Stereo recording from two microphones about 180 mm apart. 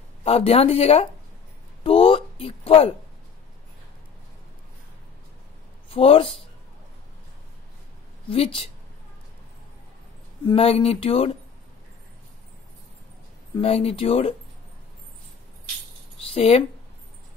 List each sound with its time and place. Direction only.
0.2 s speech: 35° left (ahead or behind)
1.8 s a sound: 30° left (ahead or behind)
5.9 s speech: 30° left (ahead or behind)
8.3 s speech: 30° left (ahead or behind)
10.4 s speech: 30° left (ahead or behind)
13.6 s speech: 35° left (ahead or behind)
16.2 s a sound: 30° left (ahead or behind)